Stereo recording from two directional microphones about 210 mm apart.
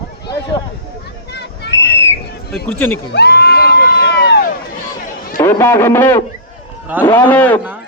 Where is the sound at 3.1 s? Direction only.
50° left (ahead or behind).